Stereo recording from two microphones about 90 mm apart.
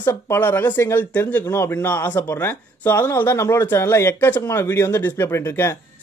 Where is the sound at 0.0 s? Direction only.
25° left (ahead or behind).